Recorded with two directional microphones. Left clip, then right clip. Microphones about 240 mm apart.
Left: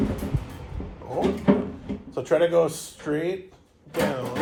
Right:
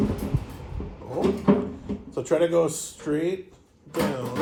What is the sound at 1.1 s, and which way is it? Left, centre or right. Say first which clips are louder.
Drawer open or close: even; centre.